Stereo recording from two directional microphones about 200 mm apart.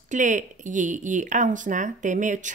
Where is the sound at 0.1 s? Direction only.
40° right (ahead or behind).